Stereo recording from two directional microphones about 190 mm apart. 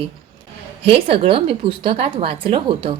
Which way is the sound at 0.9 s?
30° right (ahead or behind).